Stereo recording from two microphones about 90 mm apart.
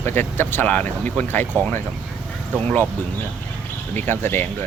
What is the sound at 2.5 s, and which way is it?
Speech, 20° left (ahead or behind).